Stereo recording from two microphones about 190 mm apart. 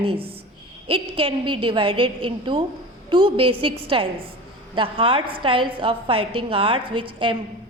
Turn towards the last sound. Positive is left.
turn(degrees=-25)  # may be behind; listen again after turning